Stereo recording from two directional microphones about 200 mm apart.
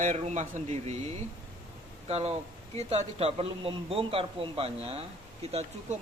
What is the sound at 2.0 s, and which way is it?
A man's voice, 30° right (ahead or behind).